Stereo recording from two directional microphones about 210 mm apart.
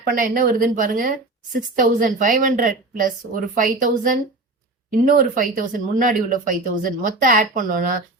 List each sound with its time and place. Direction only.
0.1 s speech: 40° right (ahead or behind)